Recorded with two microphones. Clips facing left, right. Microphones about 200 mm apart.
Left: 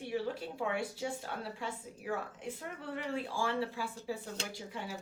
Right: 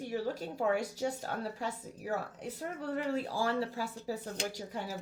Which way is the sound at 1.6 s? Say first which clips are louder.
Right 1 dB; 40° right (ahead or behind).